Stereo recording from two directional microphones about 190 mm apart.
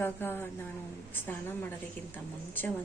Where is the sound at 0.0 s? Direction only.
10° left (ahead or behind).